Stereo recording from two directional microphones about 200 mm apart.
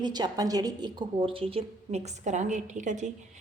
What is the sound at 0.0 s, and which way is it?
A woman's voice, 20° right (ahead or behind).